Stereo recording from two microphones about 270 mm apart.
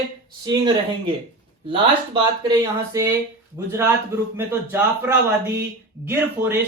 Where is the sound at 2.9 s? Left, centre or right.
Centre.